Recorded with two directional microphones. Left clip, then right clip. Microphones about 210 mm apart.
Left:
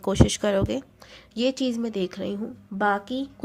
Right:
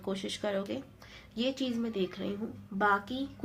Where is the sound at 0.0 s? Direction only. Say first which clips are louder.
Left 12 dB; 55° left (ahead or behind).